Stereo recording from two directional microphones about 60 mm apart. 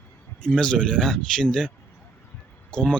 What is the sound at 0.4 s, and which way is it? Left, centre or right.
Speech, centre.